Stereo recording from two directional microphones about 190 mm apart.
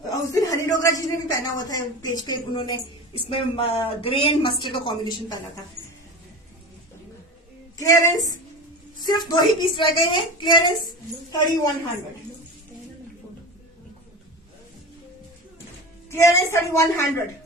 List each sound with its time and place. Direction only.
0.3 s speech: 15° left (ahead or behind)
7.8 s a woman's voice: 20° left (ahead or behind)
16.0 s a woman's voice: 15° left (ahead or behind)